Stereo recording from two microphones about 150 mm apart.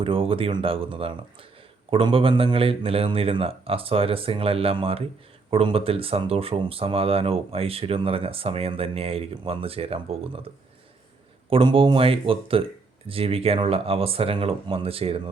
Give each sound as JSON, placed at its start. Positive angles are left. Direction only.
{"t": 0.0, "sound": "speech", "side_deg": -35}